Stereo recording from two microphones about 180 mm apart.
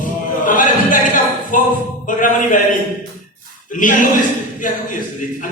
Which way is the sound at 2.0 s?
45° left (ahead or behind).